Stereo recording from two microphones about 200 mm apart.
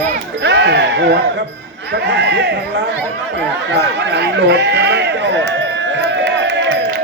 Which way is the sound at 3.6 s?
60° right (ahead or behind).